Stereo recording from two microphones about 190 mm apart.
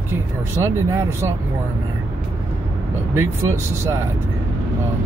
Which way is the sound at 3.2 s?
15° right (ahead or behind).